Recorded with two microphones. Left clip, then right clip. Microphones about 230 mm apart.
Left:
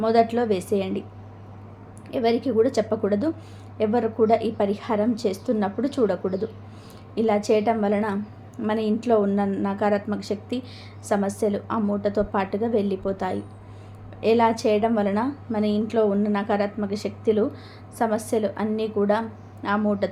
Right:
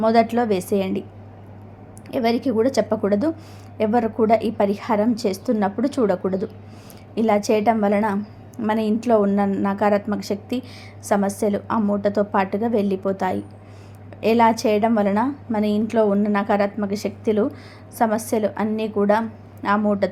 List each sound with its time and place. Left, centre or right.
0.0 s a woman's voice: centre
2.0 s a woman's voice: centre